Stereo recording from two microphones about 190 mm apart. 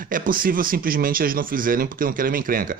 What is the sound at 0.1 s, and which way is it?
Speech, 45° right (ahead or behind).